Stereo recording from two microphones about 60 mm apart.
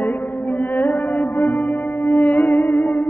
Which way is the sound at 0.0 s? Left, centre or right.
Left.